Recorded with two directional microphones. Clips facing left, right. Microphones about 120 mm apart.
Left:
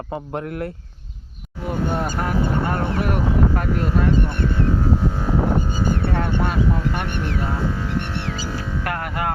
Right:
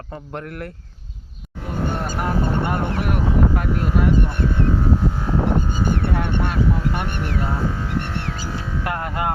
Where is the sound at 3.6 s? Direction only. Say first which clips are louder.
Even; 5° right (ahead or behind).